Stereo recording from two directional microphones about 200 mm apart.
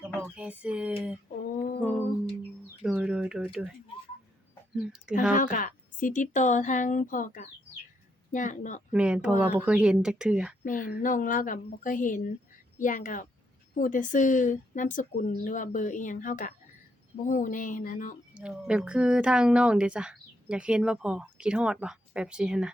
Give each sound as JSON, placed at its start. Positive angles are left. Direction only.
{"t": 0.2, "sound": "a woman's voice", "side_deg": -10}
{"t": 2.8, "sound": "speech", "side_deg": -5}
{"t": 4.8, "sound": "a woman's voice", "side_deg": -5}
{"t": 5.3, "sound": "a woman's voice", "side_deg": 40}
{"t": 8.9, "sound": "a woman's voice", "side_deg": -5}
{"t": 10.6, "sound": "a woman's voice", "side_deg": 45}
{"t": 18.3, "sound": "a woman's voice", "side_deg": -5}